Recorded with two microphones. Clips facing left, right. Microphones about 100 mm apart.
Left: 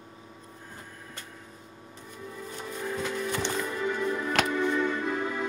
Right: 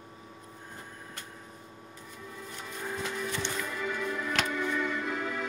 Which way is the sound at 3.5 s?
30° left (ahead or behind).